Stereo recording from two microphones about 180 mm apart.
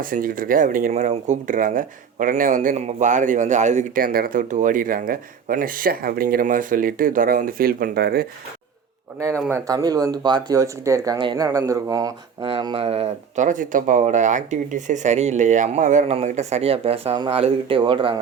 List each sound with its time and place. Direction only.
0.0 s speech: 50° right (ahead or behind)
9.5 s speech: 20° right (ahead or behind)